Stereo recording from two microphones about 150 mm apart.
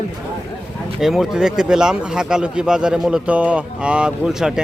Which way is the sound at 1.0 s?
Centre (ahead or behind).